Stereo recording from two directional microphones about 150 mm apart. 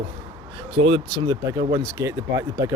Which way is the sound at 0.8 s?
40° right (ahead or behind).